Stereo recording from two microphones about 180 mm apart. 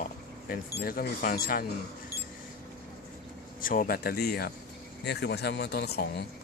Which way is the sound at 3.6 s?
50° left (ahead or behind).